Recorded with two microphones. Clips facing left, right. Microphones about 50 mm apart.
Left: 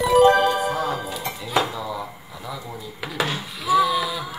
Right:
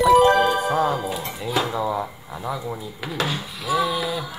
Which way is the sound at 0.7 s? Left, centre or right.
Centre.